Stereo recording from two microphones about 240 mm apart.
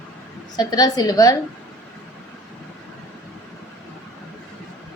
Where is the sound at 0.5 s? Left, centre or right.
Centre.